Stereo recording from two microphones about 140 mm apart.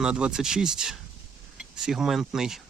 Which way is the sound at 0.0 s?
5° right (ahead or behind).